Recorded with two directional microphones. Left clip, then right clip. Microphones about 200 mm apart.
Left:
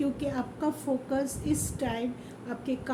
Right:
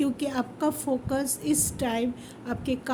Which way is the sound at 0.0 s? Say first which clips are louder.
Right 3 dB; 55° right (ahead or behind).